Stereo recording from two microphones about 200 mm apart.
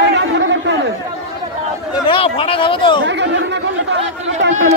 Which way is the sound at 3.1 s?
60° right (ahead or behind).